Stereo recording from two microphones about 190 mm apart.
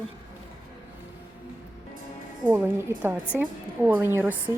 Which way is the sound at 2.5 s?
10° right (ahead or behind).